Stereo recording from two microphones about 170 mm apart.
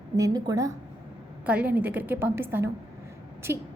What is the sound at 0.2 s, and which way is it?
Speech, 20° right (ahead or behind).